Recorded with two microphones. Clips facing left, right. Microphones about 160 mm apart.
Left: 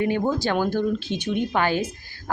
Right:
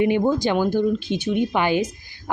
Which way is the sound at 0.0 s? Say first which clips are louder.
Right 4 dB; 15° right (ahead or behind).